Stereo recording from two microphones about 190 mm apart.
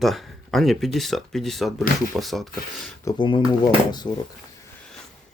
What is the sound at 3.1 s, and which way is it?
Speech, 25° left (ahead or behind).